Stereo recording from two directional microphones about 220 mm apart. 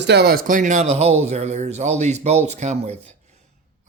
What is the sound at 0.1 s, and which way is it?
Speech, 45° right (ahead or behind).